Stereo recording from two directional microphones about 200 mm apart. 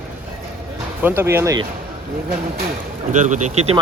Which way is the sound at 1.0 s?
10° right (ahead or behind).